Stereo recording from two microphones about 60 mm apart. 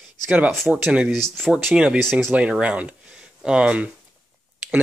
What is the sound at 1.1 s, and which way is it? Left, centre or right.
Speech, centre.